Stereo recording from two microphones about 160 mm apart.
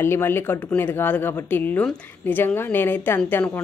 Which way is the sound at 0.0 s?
15° left (ahead or behind).